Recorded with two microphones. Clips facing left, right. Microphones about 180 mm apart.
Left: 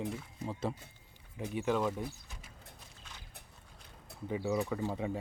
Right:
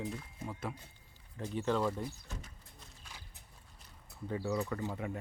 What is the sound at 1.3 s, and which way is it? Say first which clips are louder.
Speech: left 1 dB; 10° left (ahead or behind).